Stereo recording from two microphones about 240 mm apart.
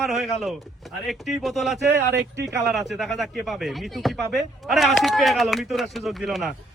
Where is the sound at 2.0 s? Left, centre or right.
Right.